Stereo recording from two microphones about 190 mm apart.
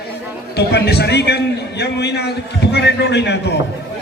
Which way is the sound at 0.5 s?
60° left (ahead or behind).